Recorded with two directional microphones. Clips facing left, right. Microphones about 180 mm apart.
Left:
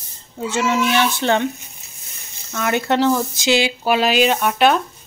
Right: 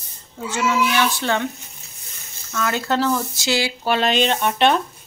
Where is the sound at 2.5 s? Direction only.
15° left (ahead or behind).